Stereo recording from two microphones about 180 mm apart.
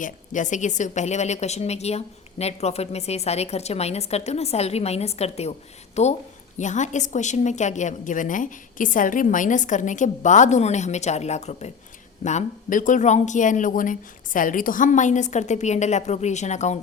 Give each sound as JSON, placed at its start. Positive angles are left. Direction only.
{"t": 0.0, "sound": "a woman's voice", "side_deg": 45}